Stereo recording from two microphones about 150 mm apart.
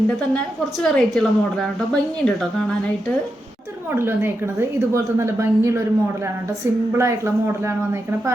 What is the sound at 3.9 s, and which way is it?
A woman's voice, 15° right (ahead or behind).